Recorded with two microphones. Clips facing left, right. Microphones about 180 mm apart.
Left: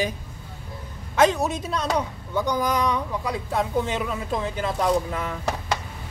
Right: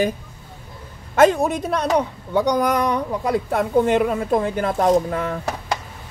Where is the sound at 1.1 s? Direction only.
55° right (ahead or behind).